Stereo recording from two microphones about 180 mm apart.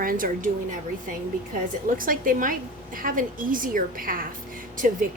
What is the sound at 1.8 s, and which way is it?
A woman's voice, 50° right (ahead or behind).